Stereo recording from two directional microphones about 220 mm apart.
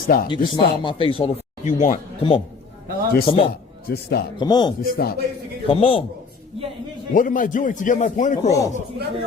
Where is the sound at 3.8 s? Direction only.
45° left (ahead or behind).